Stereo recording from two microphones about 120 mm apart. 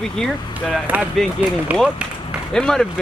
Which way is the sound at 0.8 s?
15° right (ahead or behind).